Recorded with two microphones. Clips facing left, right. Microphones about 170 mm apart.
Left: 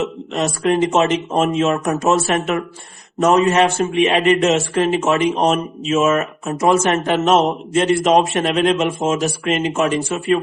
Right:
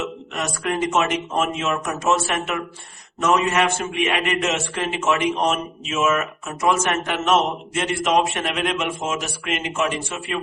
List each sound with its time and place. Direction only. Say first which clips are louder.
0.3 s a man's voice: left 8 dB; 30° left (ahead or behind)